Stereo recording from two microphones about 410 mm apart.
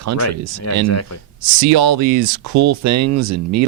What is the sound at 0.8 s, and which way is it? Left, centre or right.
Speech, left.